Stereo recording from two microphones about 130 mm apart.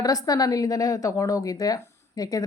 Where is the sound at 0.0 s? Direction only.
30° left (ahead or behind).